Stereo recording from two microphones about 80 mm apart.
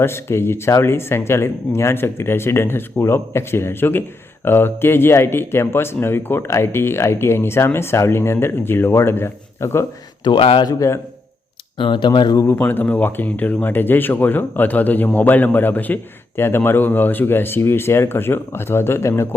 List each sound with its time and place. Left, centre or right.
0.0 s speech: left
10.2 s speech: left
10.7 s speech: left
11.8 s speech: left
12.5 s speech: left